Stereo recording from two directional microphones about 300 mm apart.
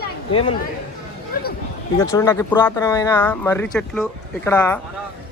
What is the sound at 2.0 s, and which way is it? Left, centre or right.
A man's voice, centre.